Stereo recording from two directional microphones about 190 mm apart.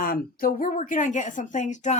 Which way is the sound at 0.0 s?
50° left (ahead or behind).